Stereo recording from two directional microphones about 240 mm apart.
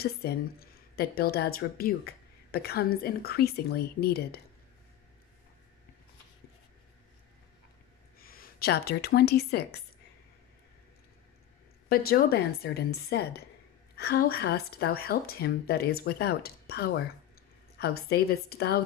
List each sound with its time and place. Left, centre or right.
0.0 s a woman's voice: left
8.2 s speech: left
11.9 s a woman's voice: left